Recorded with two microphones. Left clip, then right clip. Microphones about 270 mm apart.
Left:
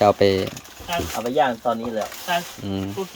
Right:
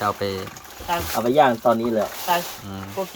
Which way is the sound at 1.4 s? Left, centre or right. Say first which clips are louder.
Right 3 dB; right.